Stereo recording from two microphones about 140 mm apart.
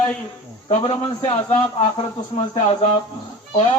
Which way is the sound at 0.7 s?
40° left (ahead or behind).